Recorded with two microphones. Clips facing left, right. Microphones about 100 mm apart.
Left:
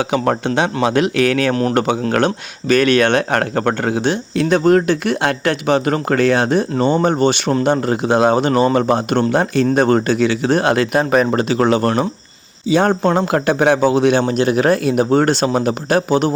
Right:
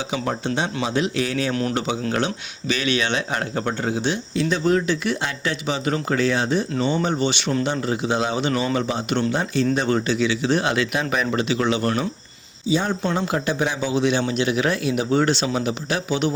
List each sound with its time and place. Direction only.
0.1 s speech: 65° left (ahead or behind); by 12.0 s 45° left (ahead or behind)
12.7 s speech: 55° left (ahead or behind)